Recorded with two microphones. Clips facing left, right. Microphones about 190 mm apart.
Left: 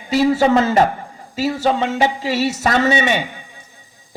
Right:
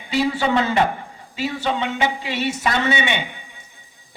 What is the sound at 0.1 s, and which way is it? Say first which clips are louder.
A man's voice: left 6 dB; 40° left (ahead or behind).